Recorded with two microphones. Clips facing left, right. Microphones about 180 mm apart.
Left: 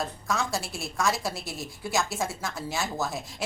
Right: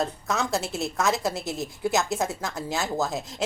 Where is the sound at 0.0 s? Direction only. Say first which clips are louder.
Right 3 dB; 20° right (ahead or behind).